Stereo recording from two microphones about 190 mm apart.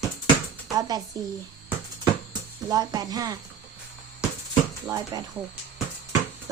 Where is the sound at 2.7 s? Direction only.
20° right (ahead or behind).